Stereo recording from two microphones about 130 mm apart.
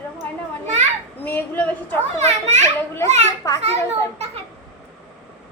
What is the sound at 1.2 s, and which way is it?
Speech, 15° left (ahead or behind).